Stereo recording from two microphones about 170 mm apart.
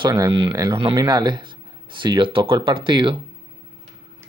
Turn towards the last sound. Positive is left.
turn(degrees=-30)  # may be behind; listen again after turning